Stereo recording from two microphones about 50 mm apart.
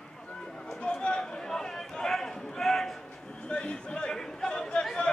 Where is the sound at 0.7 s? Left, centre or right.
Centre.